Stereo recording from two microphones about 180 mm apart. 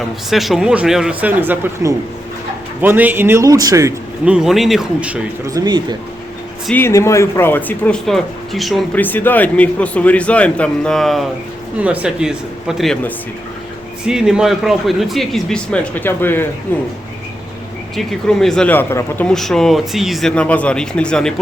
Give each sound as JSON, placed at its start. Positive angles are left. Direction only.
{"t": 0.3, "sound": "a man's voice", "side_deg": 0}
{"t": 4.3, "sound": "speech", "side_deg": -5}
{"t": 5.5, "sound": "speech", "side_deg": -20}
{"t": 6.7, "sound": "speech", "side_deg": 10}
{"t": 17.9, "sound": "speech", "side_deg": 0}